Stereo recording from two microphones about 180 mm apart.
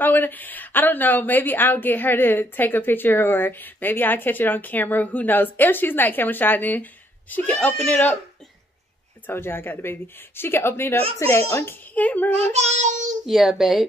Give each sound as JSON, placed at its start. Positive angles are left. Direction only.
{"t": 0.0, "sound": "a woman's voice", "side_deg": 10}
{"t": 9.3, "sound": "a woman's voice", "side_deg": 10}
{"t": 12.4, "sound": "child singing", "side_deg": -40}
{"t": 13.3, "sound": "a child's voice", "side_deg": 0}